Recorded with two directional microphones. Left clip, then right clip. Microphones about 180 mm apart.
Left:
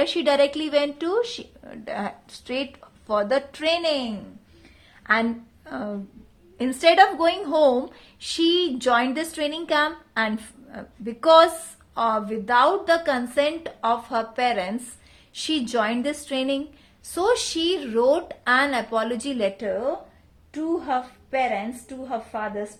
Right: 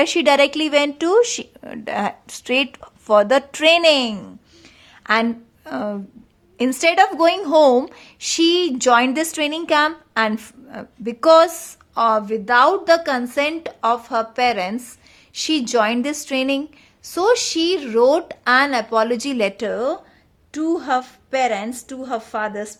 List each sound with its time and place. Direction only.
0.0 s a woman's voice: 35° right (ahead or behind)